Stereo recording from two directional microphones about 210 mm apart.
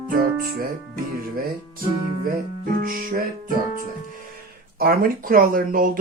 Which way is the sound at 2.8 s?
40° right (ahead or behind).